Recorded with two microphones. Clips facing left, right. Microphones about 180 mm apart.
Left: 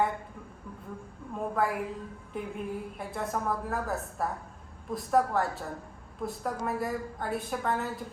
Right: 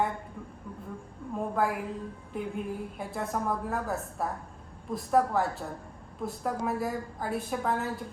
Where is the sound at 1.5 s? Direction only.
Centre (ahead or behind).